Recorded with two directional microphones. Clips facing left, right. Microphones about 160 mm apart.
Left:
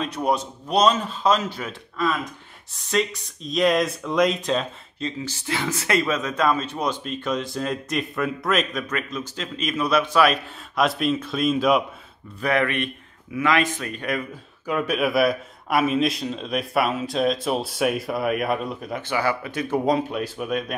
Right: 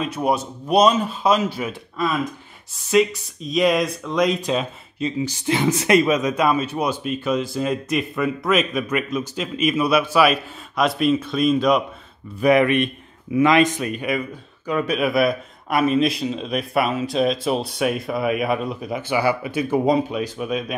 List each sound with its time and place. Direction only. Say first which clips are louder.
0.0 s speech: right 2 dB; 5° right (ahead or behind)
12.4 s speech: right 7 dB; 15° right (ahead or behind)
14.0 s speech: right 3 dB; centre (ahead or behind)